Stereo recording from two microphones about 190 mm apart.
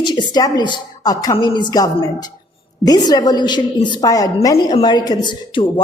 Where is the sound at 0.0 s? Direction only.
25° left (ahead or behind).